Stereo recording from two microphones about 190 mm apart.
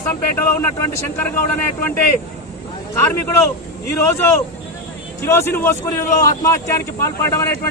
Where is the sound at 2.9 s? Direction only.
15° left (ahead or behind).